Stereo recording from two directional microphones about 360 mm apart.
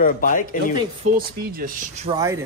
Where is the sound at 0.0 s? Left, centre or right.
Left.